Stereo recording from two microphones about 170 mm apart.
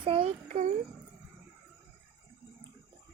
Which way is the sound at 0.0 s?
35° right (ahead or behind).